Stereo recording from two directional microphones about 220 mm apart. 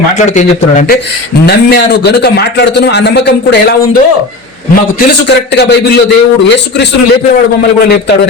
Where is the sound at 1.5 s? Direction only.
45° left (ahead or behind).